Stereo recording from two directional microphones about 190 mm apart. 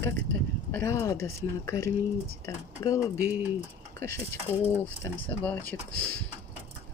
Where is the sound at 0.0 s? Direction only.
10° left (ahead or behind).